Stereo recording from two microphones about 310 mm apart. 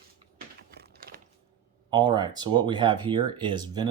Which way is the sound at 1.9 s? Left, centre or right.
Centre.